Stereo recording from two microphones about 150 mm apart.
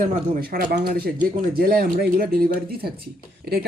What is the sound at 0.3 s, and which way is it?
A woman's voice, 80° right.